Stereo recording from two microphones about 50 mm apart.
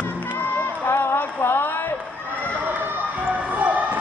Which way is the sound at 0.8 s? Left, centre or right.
Left.